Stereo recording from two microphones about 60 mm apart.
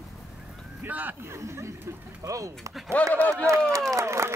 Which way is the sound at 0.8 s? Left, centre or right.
Right.